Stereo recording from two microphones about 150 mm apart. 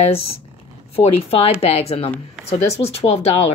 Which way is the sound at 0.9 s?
40° left (ahead or behind).